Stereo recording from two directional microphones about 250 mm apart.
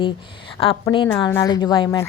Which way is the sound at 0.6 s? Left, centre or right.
Left.